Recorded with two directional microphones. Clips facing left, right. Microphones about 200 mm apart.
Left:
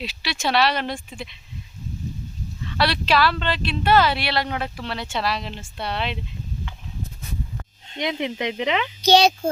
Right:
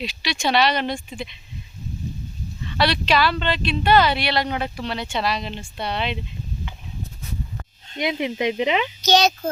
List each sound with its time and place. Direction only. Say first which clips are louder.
0.0 s speech: right 2 dB; centre (ahead or behind)
2.6 s speech: right 1 dB; centre (ahead or behind)
7.9 s speech: right 2 dB; 10° right (ahead or behind)
9.0 s a child's voice: left 4 dB; 30° left (ahead or behind)